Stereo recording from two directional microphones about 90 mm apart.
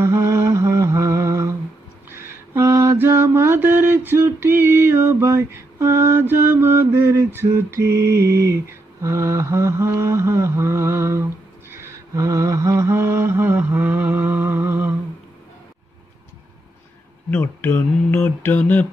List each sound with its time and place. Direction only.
0.0 s humming: 35° right (ahead or behind)
2.0 s mantra: 30° right (ahead or behind)
7.3 s a sound: 30° right (ahead or behind)
17.3 s mantra: 20° left (ahead or behind)